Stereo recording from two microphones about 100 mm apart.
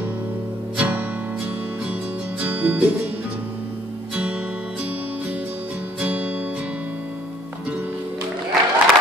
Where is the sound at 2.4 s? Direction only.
15° right (ahead or behind).